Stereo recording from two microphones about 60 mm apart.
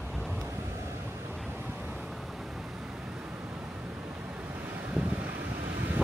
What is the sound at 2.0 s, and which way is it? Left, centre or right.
Vehicle, centre.